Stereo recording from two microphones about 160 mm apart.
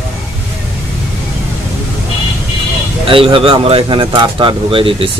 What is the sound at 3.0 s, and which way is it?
Speech, 35° right (ahead or behind).